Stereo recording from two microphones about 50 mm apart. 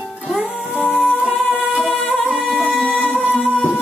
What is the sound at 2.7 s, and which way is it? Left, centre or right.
Music, centre.